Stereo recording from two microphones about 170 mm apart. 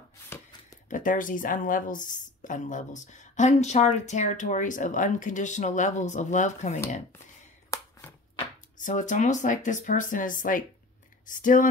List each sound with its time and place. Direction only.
0.8 s a woman's voice: 50° left (ahead or behind)
7.7 s a sound: 15° left (ahead or behind)
8.7 s a woman's voice: 50° left (ahead or behind)